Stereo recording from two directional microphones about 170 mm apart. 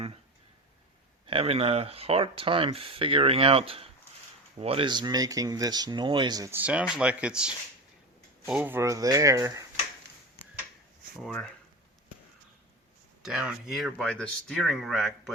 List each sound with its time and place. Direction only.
1.3 s speech: 35° right (ahead or behind); by 9.6 s 20° right (ahead or behind)
11.2 s speech: 5° left (ahead or behind)
13.2 s speech: centre (ahead or behind)